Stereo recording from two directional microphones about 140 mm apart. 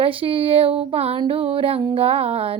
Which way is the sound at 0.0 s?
40° right (ahead or behind).